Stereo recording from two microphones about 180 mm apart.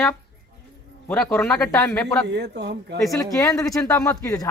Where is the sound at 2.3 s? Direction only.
70° right (ahead or behind).